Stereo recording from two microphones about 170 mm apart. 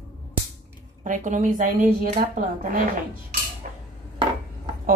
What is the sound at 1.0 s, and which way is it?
A woman's voice, 50° right (ahead or behind).